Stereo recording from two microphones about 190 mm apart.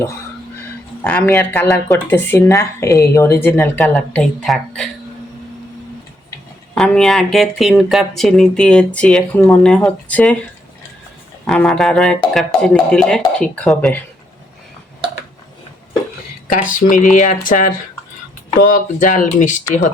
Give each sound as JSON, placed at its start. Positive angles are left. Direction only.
{"t": 1.0, "sound": "speech", "side_deg": 10}
{"t": 6.7, "sound": "speech", "side_deg": 5}
{"t": 11.4, "sound": "speech", "side_deg": 5}
{"t": 16.5, "sound": "speech", "side_deg": 45}